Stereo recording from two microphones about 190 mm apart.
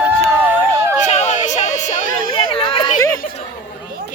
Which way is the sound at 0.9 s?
35° left (ahead or behind).